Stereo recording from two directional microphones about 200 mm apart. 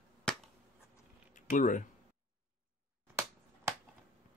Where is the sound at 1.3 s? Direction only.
40° left (ahead or behind).